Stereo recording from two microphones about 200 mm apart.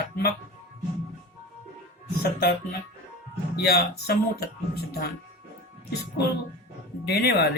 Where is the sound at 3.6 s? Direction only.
50° left (ahead or behind).